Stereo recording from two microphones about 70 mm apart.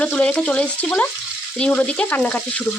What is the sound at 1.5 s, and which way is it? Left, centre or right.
Frying, centre.